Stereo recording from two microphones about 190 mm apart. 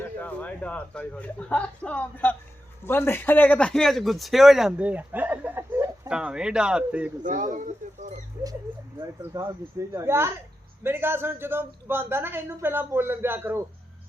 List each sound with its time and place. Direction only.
0.0 s a man's voice: 10° left (ahead or behind)
7.2 s speech: 40° right (ahead or behind)
8.4 s a woman's voice: 10° right (ahead or behind)